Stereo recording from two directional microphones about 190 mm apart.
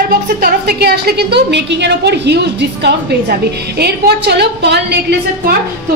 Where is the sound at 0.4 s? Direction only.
55° right (ahead or behind).